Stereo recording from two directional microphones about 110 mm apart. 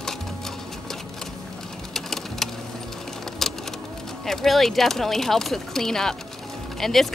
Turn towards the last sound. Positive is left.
turn(degrees=0)  # may be behind; listen again after turning